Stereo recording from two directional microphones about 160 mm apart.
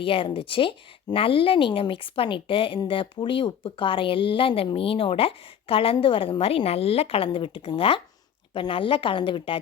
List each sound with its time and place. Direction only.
0.0 s speech: 35° left (ahead or behind)